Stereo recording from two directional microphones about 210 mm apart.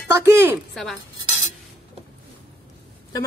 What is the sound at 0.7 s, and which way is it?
Speech, centre (ahead or behind).